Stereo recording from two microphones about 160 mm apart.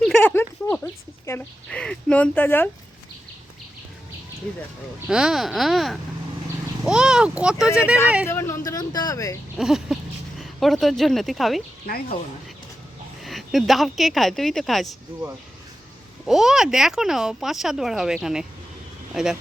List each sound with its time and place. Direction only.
0.2 s a sound: 10° left (ahead or behind)
1.3 s speech: 5° left (ahead or behind)
5.0 s speech: 5° right (ahead or behind)
8.3 s speech: 15° left (ahead or behind)
9.6 s speech: 5° right (ahead or behind)
11.9 s speech: 70° left (ahead or behind)
13.2 s speech: centre (ahead or behind)
16.2 s speech: centre (ahead or behind)